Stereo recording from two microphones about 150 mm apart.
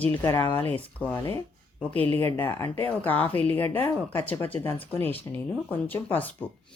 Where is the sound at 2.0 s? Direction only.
40° right (ahead or behind).